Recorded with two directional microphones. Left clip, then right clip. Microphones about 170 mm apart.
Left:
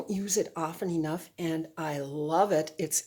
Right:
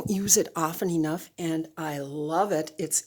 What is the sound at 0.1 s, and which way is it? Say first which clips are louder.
Speech: right 6 dB; 50° right (ahead or behind).